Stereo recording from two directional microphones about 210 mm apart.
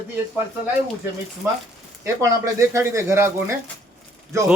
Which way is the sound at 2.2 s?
15° right (ahead or behind).